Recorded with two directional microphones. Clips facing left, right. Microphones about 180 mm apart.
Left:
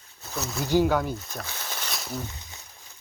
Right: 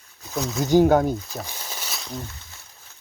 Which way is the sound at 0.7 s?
45° right (ahead or behind).